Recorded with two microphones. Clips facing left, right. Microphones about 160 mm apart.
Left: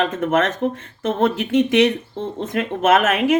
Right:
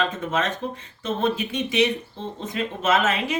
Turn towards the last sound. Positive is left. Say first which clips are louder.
# left 6 dB
turn(degrees=55)  # may be behind; listen again after turning